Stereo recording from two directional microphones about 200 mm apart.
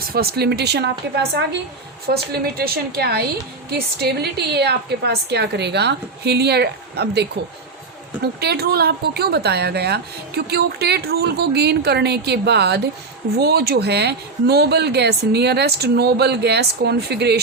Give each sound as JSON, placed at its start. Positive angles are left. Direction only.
{"t": 0.1, "sound": "a woman's voice", "side_deg": -50}